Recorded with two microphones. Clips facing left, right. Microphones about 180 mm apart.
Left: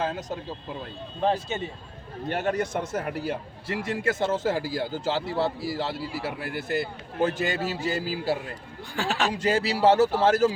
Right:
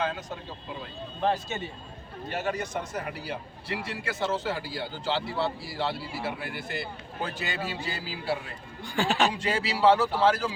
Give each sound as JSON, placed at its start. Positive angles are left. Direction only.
{"t": 0.0, "sound": "speech", "side_deg": 40}
{"t": 2.3, "sound": "speech", "side_deg": 60}
{"t": 9.0, "sound": "speech", "side_deg": 0}
{"t": 9.4, "sound": "speech", "side_deg": 45}